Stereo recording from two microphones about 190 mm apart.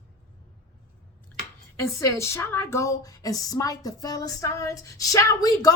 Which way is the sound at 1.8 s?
15° left (ahead or behind).